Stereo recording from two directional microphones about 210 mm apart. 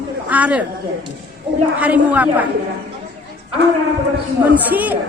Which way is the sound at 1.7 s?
5° right (ahead or behind).